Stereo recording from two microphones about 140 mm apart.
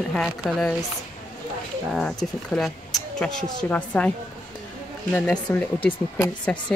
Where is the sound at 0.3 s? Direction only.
Centre (ahead or behind).